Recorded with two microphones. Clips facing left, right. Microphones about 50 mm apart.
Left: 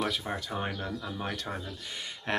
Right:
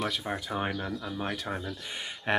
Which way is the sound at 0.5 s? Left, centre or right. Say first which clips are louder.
Right 2 dB; centre.